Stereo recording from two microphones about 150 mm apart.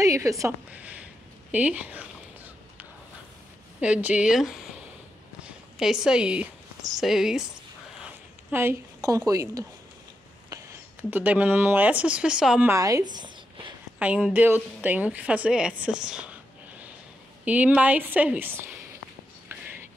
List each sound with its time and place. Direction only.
0.0 s a woman's voice: 20° right (ahead or behind)
0.7 s a woman's voice: 10° right (ahead or behind)
3.8 s a woman's voice: 10° right (ahead or behind)
12.6 s speech: 20° right (ahead or behind)
13.9 s a woman's voice: 5° right (ahead or behind)
17.5 s a woman's voice: 10° right (ahead or behind)
19.5 s a sound: 15° right (ahead or behind)